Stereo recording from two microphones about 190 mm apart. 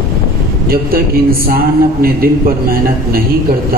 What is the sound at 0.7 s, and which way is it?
A man's voice, 50° right (ahead or behind).